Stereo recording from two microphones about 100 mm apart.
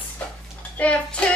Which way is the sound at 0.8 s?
10° left (ahead or behind).